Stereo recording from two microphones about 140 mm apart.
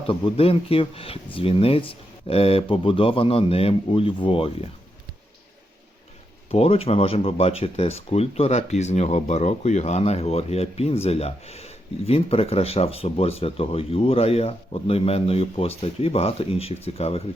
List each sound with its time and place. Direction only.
0.1 s speech: 40° left (ahead or behind)
6.5 s speech: 45° left (ahead or behind)